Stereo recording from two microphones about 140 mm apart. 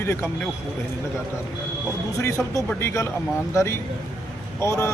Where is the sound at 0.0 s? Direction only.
15° left (ahead or behind).